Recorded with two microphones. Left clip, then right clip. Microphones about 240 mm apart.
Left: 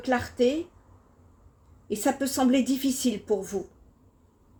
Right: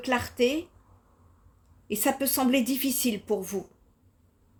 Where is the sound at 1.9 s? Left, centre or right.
Right.